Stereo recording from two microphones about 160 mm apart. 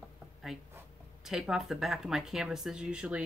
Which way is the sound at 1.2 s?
Centre (ahead or behind).